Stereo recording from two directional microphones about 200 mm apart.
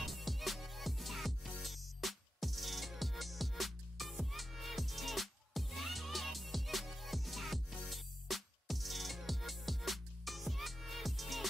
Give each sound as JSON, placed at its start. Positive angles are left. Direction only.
{"t": 0.0, "sound": "music", "side_deg": 0}